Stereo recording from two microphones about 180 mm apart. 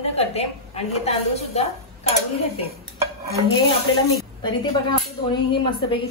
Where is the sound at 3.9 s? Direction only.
25° left (ahead or behind).